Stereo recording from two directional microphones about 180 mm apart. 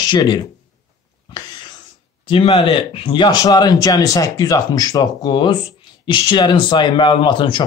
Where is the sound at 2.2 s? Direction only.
30° left (ahead or behind).